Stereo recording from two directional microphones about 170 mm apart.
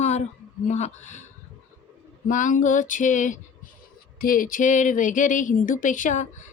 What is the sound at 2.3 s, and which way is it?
A woman's voice, 50° left (ahead or behind).